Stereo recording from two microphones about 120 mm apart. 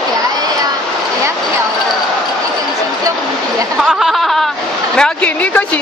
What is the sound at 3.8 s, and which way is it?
Speech, centre (ahead or behind).